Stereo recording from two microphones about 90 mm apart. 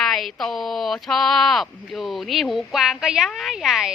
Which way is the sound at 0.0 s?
Centre (ahead or behind).